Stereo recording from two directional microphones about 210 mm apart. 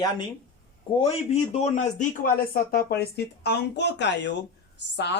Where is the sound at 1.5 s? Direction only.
35° left (ahead or behind).